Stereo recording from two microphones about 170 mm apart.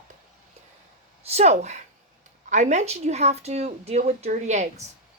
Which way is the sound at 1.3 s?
40° right (ahead or behind).